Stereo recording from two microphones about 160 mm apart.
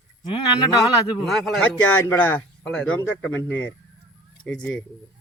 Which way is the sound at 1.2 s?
Centre (ahead or behind).